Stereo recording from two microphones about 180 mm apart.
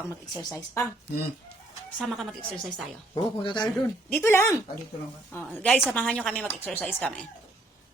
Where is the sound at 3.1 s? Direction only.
25° left (ahead or behind).